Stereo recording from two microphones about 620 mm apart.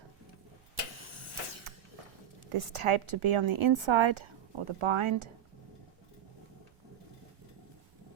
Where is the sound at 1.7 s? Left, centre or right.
Right.